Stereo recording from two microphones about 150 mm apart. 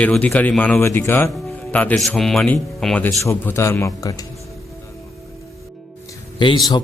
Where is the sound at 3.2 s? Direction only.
20° left (ahead or behind).